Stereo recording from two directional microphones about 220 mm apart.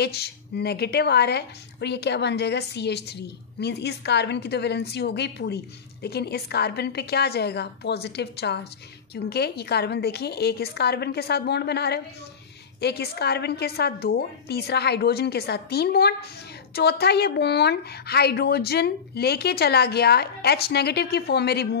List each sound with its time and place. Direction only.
0.0 s a woman's voice: 45° left (ahead or behind)